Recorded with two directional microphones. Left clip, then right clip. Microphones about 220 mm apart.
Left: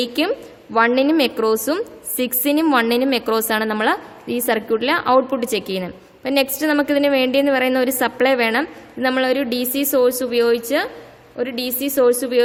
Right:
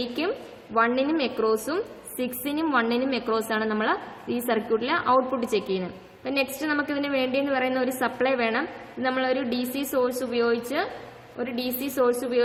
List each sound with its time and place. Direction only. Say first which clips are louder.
0.0 s a woman's voice: left 8 dB; 45° left (ahead or behind)